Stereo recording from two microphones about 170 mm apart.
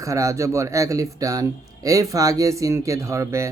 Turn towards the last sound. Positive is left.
turn(degrees=-15)  # may be behind; listen again after turning